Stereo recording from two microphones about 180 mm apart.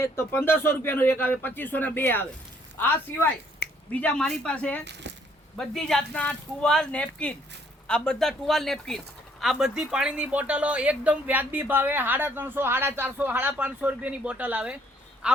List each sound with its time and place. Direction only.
0.0 s speech: 10° left (ahead or behind)
3.6 s finger snapping: 60° left (ahead or behind)
4.0 s speech: 5° left (ahead or behind)
4.9 s speech: 75° right (ahead or behind)
5.5 s speech: 5° left (ahead or behind)